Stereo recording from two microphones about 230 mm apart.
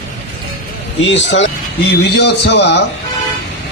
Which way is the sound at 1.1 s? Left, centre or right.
Left.